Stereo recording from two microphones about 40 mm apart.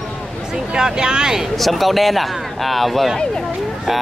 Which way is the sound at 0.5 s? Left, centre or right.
Centre.